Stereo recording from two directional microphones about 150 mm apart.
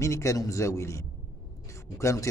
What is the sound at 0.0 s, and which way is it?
A man's voice, 20° left (ahead or behind).